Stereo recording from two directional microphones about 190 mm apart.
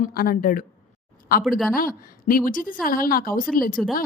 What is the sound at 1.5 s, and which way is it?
Speech, centre (ahead or behind).